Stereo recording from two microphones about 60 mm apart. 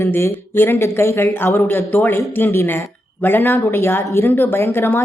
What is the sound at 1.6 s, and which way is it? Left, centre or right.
A woman's voice, left.